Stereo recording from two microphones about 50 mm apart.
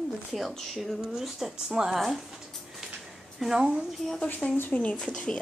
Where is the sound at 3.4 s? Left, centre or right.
Centre.